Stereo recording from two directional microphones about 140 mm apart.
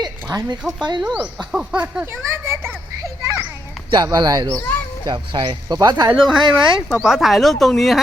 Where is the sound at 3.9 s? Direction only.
30° right (ahead or behind).